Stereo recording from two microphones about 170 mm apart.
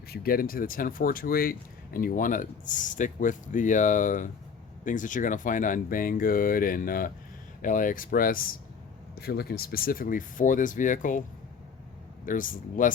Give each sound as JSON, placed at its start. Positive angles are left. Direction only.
{"t": 0.1, "sound": "speech", "side_deg": 60}
{"t": 9.2, "sound": "speech", "side_deg": 65}
{"t": 12.2, "sound": "speech", "side_deg": 50}